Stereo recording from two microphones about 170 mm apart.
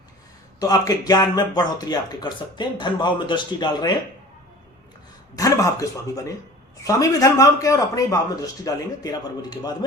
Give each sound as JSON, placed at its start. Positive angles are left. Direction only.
{"t": 0.6, "sound": "speech", "side_deg": 20}
{"t": 5.4, "sound": "speech", "side_deg": 20}